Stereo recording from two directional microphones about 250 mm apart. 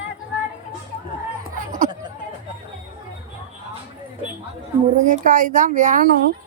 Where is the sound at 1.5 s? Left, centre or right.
Right.